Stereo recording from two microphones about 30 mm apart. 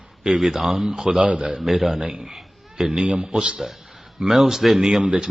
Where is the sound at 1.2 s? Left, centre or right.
Right.